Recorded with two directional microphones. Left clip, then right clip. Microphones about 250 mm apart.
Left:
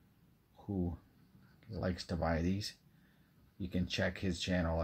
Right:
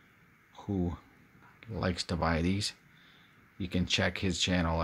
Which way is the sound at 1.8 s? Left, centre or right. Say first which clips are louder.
Right 6 dB; centre.